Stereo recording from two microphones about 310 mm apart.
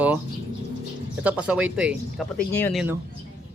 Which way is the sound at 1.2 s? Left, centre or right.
Centre.